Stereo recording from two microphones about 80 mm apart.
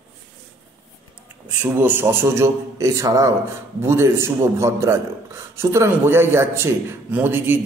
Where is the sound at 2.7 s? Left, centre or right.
Right.